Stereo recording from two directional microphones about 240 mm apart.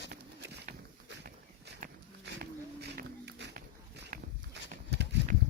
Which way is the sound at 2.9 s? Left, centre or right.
Right.